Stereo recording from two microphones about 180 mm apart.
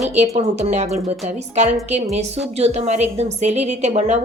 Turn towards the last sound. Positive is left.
turn(degrees=-40)  # may be behind; listen again after turning